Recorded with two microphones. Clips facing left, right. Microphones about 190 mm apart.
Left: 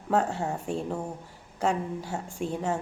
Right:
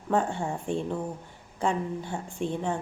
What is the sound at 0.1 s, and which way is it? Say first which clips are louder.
A woman's voice: even; 5° left (ahead or behind).